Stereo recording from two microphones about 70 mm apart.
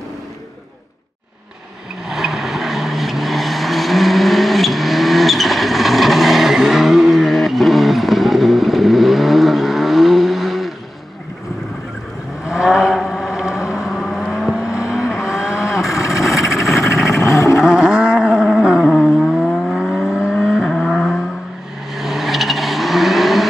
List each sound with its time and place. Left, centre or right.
2.0 s vehicle: centre
12.4 s vehicle: centre
15.9 s vehicle: left
17.6 s wild animals: centre
18.9 s vehicle: centre